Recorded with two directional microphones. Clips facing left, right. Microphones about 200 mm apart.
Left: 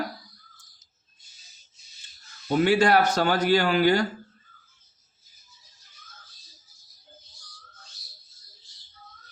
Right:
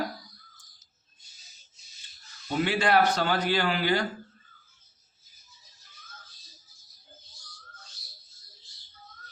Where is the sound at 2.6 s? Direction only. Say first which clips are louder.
Left 3 dB; 45° left (ahead or behind).